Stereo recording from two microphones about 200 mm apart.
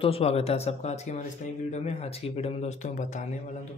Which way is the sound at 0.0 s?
30° left (ahead or behind).